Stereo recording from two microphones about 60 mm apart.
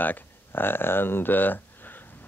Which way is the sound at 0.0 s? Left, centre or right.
Left.